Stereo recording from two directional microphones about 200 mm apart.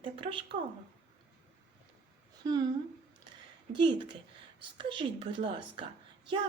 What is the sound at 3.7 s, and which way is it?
A woman's voice, 25° right (ahead or behind).